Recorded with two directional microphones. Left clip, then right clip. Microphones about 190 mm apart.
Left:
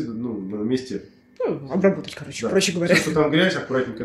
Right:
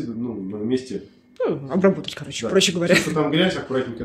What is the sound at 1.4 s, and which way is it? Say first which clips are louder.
Speech: right 1 dB; 20° right (ahead or behind).